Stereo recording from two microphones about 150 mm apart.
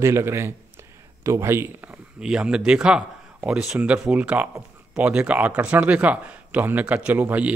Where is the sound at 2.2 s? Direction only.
5° right (ahead or behind).